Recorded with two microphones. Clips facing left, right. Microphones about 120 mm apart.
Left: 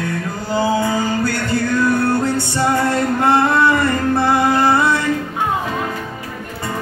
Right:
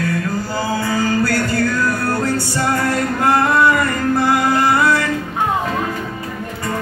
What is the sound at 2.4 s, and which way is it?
Music, 25° left (ahead or behind).